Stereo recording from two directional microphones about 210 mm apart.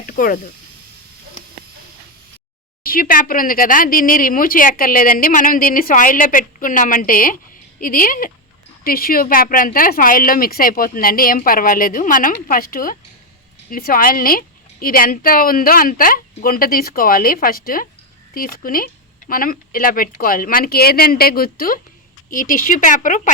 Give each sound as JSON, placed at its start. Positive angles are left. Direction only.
{"t": 0.0, "sound": "speech", "side_deg": 40}
{"t": 2.8, "sound": "a woman's voice", "side_deg": 45}